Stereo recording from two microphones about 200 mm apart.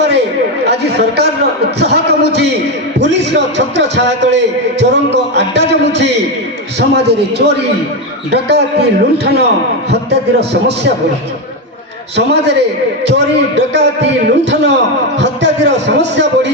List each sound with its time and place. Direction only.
0.7 s speech: 55° right (ahead or behind)
12.1 s speech: 55° right (ahead or behind)